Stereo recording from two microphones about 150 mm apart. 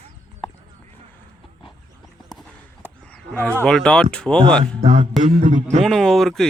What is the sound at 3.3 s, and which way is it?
Speech, 10° left (ahead or behind).